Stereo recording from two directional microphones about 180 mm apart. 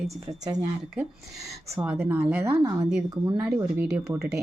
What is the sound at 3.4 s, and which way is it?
Speech, 5° right (ahead or behind).